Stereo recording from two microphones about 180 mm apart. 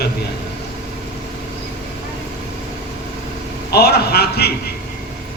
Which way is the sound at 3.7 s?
60° left (ahead or behind).